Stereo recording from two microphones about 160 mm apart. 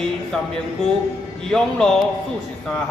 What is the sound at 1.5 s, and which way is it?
Speech, 5° left (ahead or behind).